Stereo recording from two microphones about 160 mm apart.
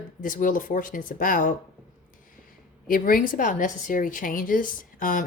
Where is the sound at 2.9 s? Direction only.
60° left (ahead or behind).